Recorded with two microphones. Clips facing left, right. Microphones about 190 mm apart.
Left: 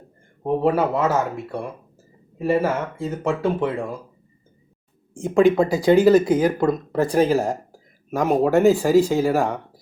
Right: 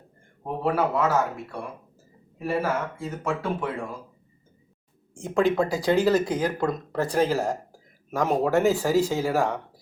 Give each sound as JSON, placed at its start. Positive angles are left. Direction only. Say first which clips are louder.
{"t": 0.6, "sound": "speech", "louder": "left 2 dB", "side_deg": 25}
{"t": 5.2, "sound": "speech", "louder": "left 6 dB", "side_deg": 10}